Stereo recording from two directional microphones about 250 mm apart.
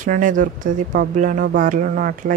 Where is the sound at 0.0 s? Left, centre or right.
Right.